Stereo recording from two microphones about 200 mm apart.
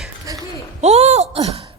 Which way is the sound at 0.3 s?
15° right (ahead or behind).